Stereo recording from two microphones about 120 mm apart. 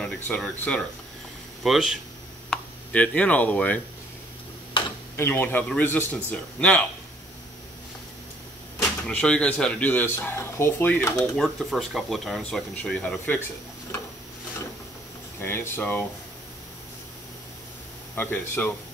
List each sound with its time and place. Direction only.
0.0 s speech: 5° left (ahead or behind)
2.5 s speech: 10° left (ahead or behind)
5.1 s speech: 15° left (ahead or behind)
9.0 s speech: 10° left (ahead or behind)
11.3 s speech: centre (ahead or behind)
15.4 s speech: 20° left (ahead or behind)
18.1 s speech: 15° left (ahead or behind)